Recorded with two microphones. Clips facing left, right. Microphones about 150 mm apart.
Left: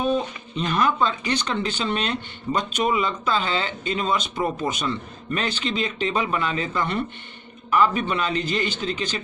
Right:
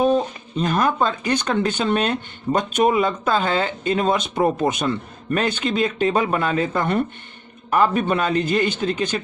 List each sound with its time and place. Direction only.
0.0 s speech: 40° right (ahead or behind)